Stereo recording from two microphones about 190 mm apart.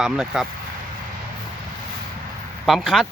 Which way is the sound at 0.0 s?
Centre (ahead or behind).